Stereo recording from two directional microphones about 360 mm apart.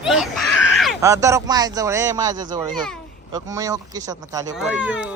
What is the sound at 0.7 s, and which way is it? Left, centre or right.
Speech, centre.